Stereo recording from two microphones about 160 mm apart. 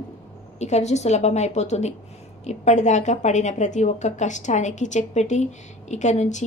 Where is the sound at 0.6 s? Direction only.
45° left (ahead or behind).